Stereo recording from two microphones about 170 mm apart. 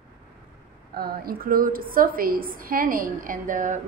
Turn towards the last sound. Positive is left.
turn(degrees=-50)  # may be behind; listen again after turning